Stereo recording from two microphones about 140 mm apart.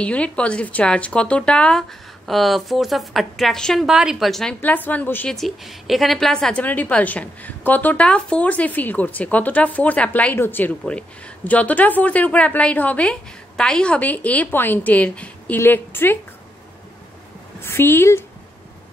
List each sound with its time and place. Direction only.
0.0 s speech: 10° left (ahead or behind)
4.6 s a woman's voice: 15° left (ahead or behind)
5.3 s a woman's voice: centre (ahead or behind); by 16.2 s 15° left (ahead or behind)
17.6 s a woman's voice: 15° left (ahead or behind)